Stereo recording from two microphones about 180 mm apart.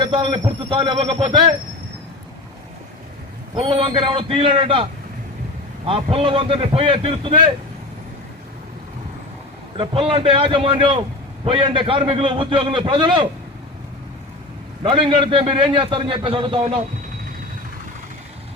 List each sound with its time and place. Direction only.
0.0 s a man's voice: 25° right (ahead or behind)
3.5 s a man's voice: 30° right (ahead or behind)
9.7 s a man's voice: 30° right (ahead or behind)
15.1 s a man's voice: 30° right (ahead or behind)